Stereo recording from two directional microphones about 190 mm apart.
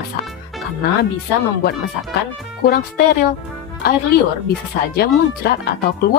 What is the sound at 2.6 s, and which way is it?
Speech, 50° left (ahead or behind).